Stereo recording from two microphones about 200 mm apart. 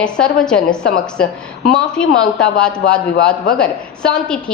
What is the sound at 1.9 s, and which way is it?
A woman's voice, 5° left (ahead or behind).